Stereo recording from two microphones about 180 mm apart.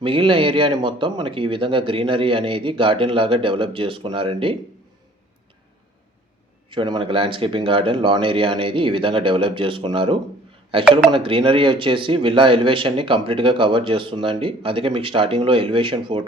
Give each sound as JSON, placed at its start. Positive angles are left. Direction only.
{"t": 0.0, "sound": "speech", "side_deg": -30}
{"t": 6.7, "sound": "speech", "side_deg": -25}